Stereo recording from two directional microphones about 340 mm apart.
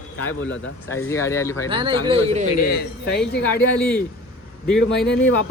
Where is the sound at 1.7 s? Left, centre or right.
Centre.